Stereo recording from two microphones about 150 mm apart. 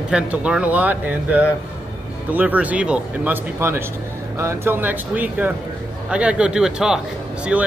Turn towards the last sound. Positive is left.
turn(degrees=-5)  # may be behind; listen again after turning